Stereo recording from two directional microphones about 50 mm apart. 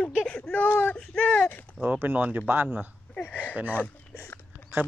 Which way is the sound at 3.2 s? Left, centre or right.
Left.